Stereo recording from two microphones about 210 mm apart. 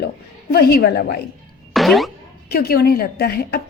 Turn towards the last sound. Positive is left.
turn(degrees=50)  # may be behind; listen again after turning